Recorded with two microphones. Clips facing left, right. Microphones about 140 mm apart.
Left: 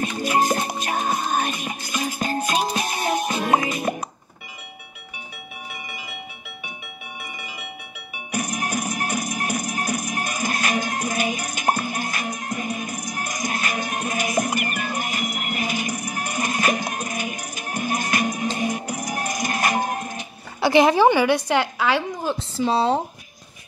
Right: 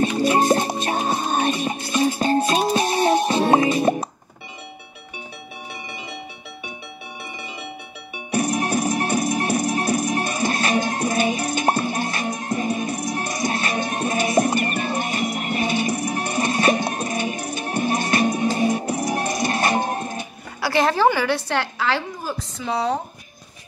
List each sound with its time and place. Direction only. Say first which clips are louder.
0.0 s music: right 4 dB; 30° right (ahead or behind)
8.3 s music: right 5 dB; 30° right (ahead or behind)
20.6 s a sound: left 3 dB; 15° left (ahead or behind)
22.6 s speech: left 3 dB; 30° left (ahead or behind)